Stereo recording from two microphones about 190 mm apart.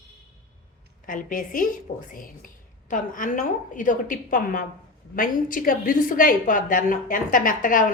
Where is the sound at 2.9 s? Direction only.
45° left (ahead or behind).